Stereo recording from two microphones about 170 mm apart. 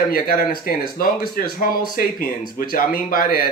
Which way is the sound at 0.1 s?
60° left (ahead or behind).